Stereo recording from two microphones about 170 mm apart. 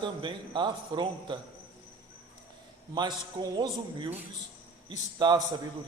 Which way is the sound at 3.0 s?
25° right (ahead or behind).